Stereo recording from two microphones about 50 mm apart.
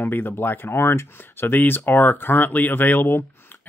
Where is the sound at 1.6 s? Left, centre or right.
Left.